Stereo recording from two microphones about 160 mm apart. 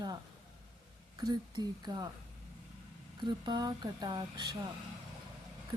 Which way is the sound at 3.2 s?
30° right (ahead or behind).